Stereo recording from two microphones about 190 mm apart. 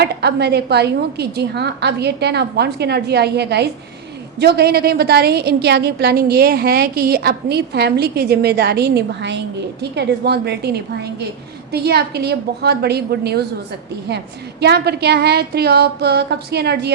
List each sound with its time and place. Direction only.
0.0 s a woman's voice: 60° right (ahead or behind)
14.6 s a woman's voice: 60° right (ahead or behind)